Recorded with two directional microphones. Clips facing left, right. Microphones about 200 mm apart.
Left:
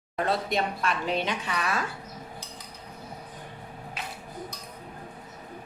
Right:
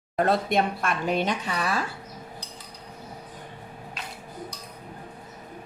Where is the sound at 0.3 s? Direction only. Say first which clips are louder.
Right 3 dB; 50° right (ahead or behind).